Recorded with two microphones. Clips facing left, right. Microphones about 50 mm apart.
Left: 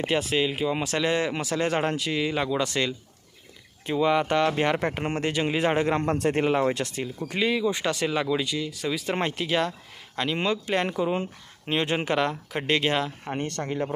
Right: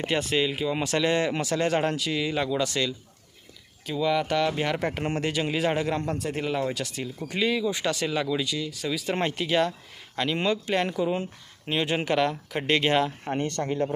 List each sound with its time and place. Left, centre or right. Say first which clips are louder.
0.1 s speech: even; centre
3.8 s speech: left 2 dB; left
6.0 s a man's voice: left 5 dB; left
6.5 s speech: left 4 dB; left
7.3 s speech: left 1 dB; centre